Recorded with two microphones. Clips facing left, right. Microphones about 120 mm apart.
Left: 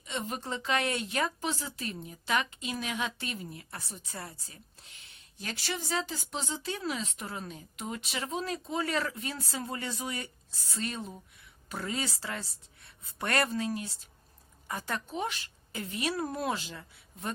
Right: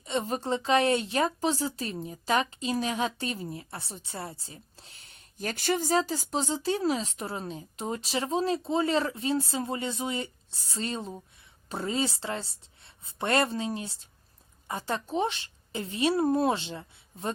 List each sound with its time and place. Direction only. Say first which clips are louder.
0.0 s a woman's voice: right 6 dB; 35° right (ahead or behind)